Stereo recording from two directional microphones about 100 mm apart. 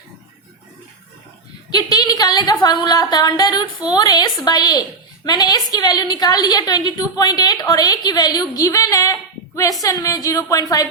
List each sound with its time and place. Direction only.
1.7 s a woman's voice: 40° left (ahead or behind)